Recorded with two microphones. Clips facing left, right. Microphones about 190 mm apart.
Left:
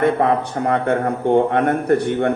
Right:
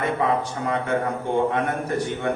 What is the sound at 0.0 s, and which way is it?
A man's voice, 60° left (ahead or behind).